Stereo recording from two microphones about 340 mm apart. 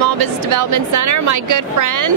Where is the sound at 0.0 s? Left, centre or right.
Right.